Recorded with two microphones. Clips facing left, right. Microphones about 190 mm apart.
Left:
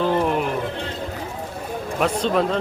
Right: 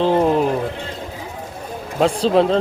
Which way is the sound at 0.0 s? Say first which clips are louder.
Right 4 dB; 30° right (ahead or behind).